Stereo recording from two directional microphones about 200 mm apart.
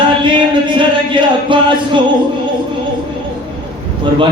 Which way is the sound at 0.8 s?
25° right (ahead or behind).